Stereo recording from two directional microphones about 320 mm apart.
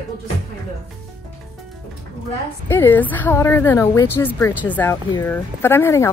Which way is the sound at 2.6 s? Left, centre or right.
Centre.